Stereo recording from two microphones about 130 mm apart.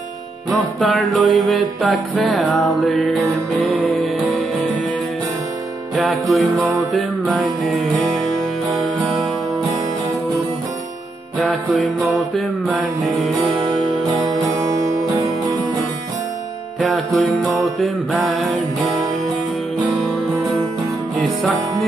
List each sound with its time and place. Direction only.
0.5 s music: centre (ahead or behind)
5.9 s music: centre (ahead or behind)
11.4 s music: centre (ahead or behind)
14.2 s music: 30° right (ahead or behind)
16.8 s music: 5° left (ahead or behind)